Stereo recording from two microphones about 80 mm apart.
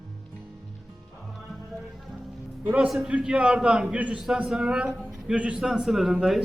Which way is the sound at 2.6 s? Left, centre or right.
Centre.